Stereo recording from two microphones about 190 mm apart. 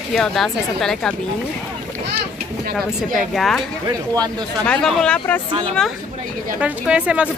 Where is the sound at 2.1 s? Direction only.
50° right (ahead or behind).